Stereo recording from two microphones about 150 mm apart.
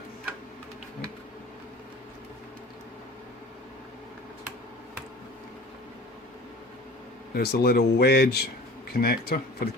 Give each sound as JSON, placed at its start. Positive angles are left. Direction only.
{"t": 7.3, "sound": "speech", "side_deg": 90}